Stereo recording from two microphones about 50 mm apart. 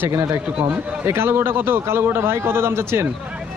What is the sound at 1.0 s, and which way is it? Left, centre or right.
A man's voice, right.